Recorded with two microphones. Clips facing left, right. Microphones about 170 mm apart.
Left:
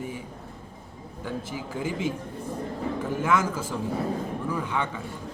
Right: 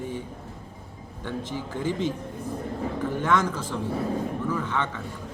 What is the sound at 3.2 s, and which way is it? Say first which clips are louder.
A man's voice: even; 10° left (ahead or behind).